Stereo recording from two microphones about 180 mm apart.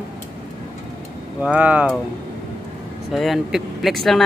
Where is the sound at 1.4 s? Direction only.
5° right (ahead or behind).